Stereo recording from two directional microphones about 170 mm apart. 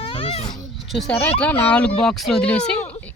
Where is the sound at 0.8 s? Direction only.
Centre (ahead or behind).